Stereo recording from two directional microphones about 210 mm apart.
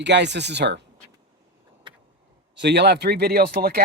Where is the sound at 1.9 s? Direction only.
25° right (ahead or behind).